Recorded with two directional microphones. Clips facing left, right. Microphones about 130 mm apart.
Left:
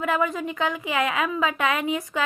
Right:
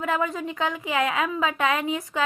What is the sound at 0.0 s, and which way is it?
Speech, 30° right (ahead or behind).